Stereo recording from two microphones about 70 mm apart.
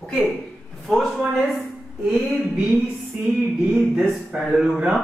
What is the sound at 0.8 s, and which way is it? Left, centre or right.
Speech, centre.